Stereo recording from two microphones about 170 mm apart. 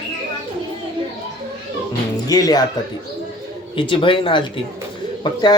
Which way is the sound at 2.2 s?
20° left (ahead or behind).